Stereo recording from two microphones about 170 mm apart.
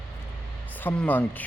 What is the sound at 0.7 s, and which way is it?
Speech, 10° left (ahead or behind).